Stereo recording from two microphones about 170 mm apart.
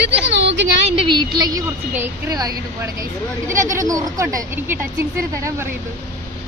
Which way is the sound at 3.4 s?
15° right (ahead or behind).